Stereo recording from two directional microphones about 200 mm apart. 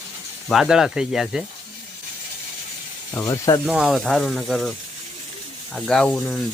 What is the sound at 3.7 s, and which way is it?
Speech, 5° right (ahead or behind).